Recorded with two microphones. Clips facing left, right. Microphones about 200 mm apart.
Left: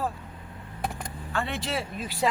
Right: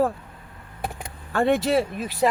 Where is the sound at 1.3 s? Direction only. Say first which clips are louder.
Right 11 dB; 50° right (ahead or behind).